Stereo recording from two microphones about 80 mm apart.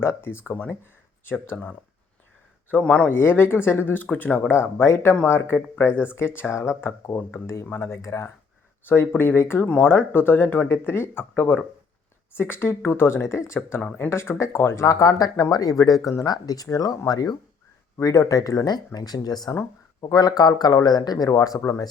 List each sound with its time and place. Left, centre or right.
0.0 s speech: left
2.8 s speech: centre
3.1 s speech: left
9.6 s speech: centre
9.9 s speech: left
13.8 s speech: left
14.1 s speech: left
17.9 s speech: left
21.2 s speech: left